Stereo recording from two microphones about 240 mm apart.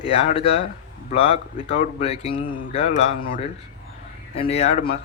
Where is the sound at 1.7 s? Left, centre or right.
Left.